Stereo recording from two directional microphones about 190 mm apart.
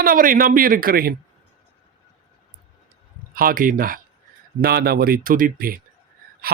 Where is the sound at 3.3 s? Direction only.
50° right (ahead or behind).